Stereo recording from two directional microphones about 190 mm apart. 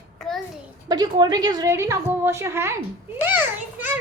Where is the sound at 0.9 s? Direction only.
20° right (ahead or behind).